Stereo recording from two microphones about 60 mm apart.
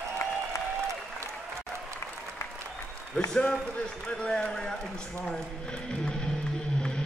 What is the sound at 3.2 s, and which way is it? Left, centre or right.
A man's voice, centre.